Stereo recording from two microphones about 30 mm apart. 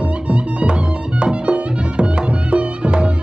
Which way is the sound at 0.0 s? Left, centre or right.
Right.